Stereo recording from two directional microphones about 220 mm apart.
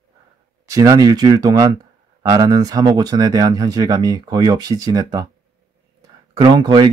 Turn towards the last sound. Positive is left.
turn(degrees=-20)  # may be behind; listen again after turning